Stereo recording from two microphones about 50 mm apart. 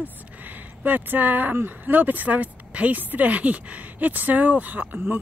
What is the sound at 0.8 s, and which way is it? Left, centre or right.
Speech, right.